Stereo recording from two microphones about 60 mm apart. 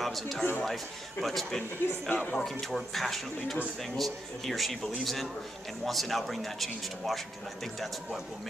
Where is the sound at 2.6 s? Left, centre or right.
Centre.